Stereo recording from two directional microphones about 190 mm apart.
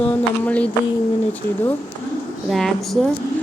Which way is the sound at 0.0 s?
5° left (ahead or behind).